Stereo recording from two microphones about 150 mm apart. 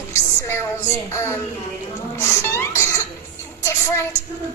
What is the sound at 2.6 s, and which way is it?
Cough, 20° left (ahead or behind).